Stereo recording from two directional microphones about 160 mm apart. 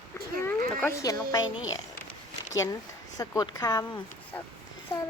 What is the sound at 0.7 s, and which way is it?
Speech, 15° left (ahead or behind).